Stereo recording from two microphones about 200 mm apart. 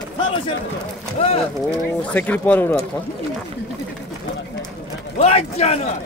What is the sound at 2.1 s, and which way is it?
Speech, 5° left (ahead or behind).